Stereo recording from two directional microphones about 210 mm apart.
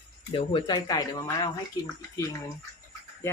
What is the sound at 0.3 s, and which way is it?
Speech, 20° left (ahead or behind).